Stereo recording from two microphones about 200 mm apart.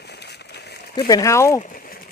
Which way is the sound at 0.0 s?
55° left (ahead or behind).